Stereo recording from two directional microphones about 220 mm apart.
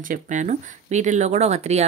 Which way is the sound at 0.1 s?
35° right (ahead or behind).